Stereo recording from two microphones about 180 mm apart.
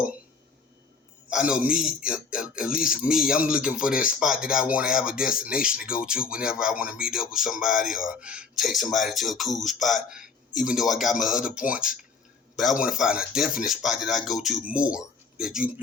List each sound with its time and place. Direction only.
1.3 s speech: 5° right (ahead or behind)